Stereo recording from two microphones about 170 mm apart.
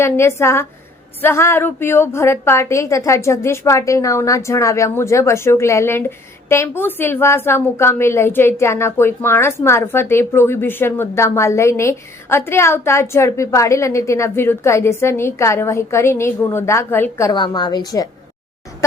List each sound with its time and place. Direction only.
0.0 s a woman's voice: 15° left (ahead or behind)